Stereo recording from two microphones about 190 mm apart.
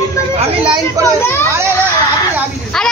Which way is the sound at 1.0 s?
15° right (ahead or behind).